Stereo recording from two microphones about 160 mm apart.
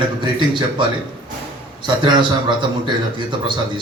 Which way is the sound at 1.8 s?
30° right (ahead or behind).